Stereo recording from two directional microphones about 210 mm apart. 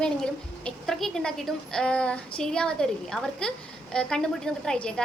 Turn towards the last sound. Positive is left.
turn(degrees=5)  # may be behind; listen again after turning